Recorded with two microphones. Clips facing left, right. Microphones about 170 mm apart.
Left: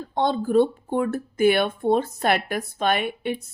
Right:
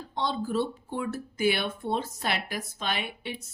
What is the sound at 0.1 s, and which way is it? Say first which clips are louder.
Speech: left 8 dB; 55° left (ahead or behind).